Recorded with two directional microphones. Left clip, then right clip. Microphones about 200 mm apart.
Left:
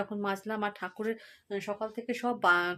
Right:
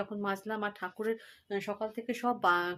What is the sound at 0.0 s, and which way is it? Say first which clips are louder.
Speech: left 2 dB; 10° left (ahead or behind).